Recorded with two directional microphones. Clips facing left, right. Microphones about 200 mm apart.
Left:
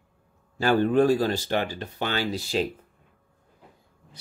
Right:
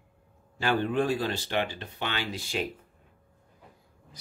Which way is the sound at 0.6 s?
40° left (ahead or behind).